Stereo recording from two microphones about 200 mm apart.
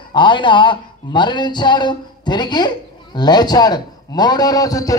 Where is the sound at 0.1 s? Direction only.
25° left (ahead or behind).